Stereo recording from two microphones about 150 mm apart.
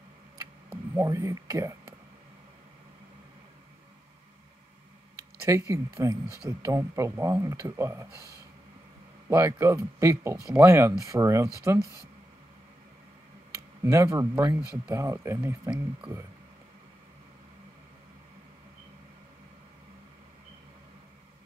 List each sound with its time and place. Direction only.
0.9 s speech: 20° right (ahead or behind)
5.4 s speech: 20° right (ahead or behind)
9.3 s speech: 20° right (ahead or behind)
13.8 s speech: 20° right (ahead or behind)